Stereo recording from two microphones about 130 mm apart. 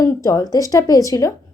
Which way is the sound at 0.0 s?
25° left (ahead or behind).